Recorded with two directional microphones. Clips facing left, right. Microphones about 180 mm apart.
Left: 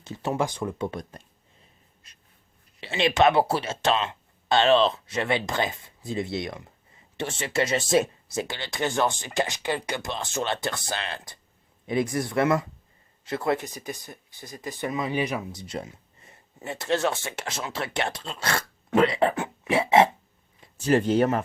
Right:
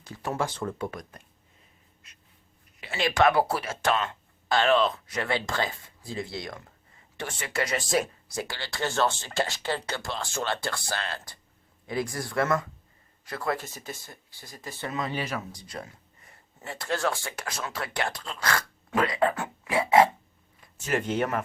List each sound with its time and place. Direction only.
0.0 s speech: 20° left (ahead or behind)
0.9 s speech: 25° left (ahead or behind)
2.8 s speech: 20° left (ahead or behind)